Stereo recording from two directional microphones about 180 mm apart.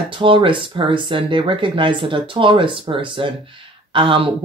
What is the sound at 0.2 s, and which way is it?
Speech, 30° right (ahead or behind).